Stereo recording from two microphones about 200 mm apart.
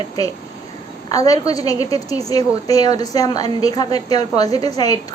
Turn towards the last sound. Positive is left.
turn(degrees=20)  # may be behind; listen again after turning